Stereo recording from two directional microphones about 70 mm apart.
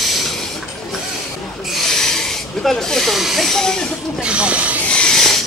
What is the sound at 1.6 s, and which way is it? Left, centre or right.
Snake, centre.